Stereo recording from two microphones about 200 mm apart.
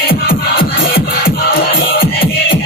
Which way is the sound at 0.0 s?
50° left (ahead or behind).